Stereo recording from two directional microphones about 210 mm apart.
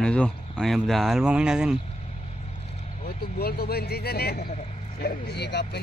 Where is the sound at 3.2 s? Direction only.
50° left (ahead or behind).